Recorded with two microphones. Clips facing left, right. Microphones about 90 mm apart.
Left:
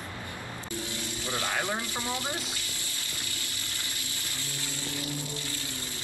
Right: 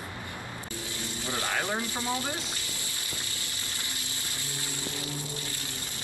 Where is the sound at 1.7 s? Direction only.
20° right (ahead or behind).